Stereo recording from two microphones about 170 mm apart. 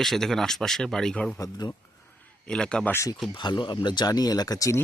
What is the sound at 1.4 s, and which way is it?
Speech, 20° left (ahead or behind).